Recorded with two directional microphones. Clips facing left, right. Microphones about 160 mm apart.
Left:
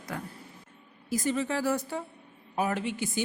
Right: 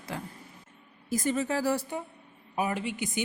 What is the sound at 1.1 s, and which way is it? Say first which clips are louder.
Speech: right 1 dB; 50° right (ahead or behind).